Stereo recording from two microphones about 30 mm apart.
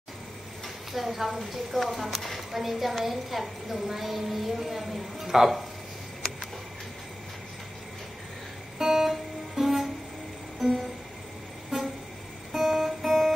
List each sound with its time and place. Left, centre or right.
0.9 s a woman's voice: centre
8.7 s music: centre
11.7 s vehicle: centre
12.5 s music: centre